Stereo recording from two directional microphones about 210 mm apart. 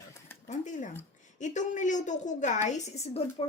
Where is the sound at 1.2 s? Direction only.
35° left (ahead or behind).